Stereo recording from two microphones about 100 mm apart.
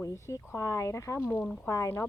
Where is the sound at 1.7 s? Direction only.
30° left (ahead or behind).